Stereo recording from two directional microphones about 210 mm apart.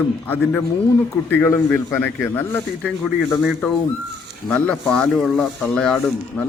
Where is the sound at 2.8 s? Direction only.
Centre (ahead or behind).